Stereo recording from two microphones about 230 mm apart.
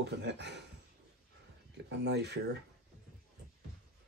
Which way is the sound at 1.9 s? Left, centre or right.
Right.